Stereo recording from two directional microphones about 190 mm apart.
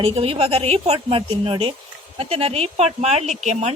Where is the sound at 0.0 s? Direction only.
30° right (ahead or behind).